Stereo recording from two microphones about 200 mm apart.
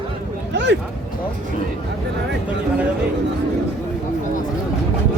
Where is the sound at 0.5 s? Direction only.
60° right (ahead or behind).